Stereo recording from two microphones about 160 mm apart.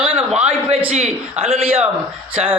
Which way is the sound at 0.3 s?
40° right (ahead or behind).